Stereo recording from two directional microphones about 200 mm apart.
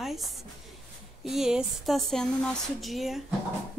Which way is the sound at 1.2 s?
Centre (ahead or behind).